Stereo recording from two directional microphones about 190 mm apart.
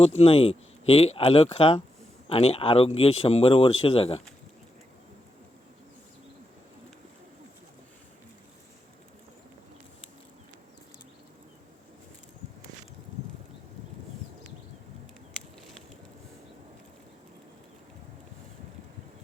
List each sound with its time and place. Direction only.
0.2 s speech: 30° left (ahead or behind)